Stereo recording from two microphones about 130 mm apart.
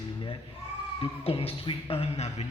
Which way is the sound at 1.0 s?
45° left (ahead or behind).